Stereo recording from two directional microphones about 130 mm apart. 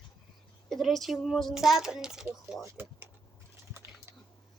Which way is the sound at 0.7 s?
Centre (ahead or behind).